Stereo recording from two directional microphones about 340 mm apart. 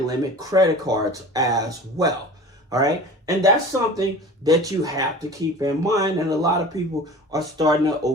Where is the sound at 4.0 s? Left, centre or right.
Centre.